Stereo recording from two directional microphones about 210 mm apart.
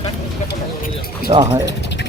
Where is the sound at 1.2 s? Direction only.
20° right (ahead or behind).